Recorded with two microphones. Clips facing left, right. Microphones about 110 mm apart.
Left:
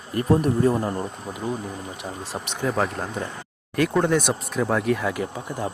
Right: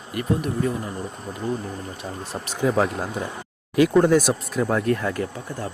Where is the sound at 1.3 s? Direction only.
10° left (ahead or behind).